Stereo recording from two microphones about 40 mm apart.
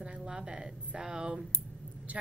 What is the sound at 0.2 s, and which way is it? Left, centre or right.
Speech, centre.